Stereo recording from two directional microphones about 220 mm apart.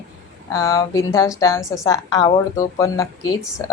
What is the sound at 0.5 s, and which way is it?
A woman's voice, 15° left (ahead or behind).